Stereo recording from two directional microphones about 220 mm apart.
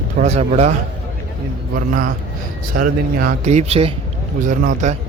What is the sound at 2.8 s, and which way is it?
Speech, 35° right (ahead or behind).